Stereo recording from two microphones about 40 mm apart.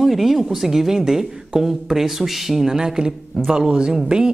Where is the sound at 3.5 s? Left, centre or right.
Right.